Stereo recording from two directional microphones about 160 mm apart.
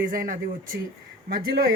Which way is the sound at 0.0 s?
60° right (ahead or behind).